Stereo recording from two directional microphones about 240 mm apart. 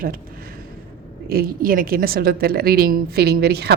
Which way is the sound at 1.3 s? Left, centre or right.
Right.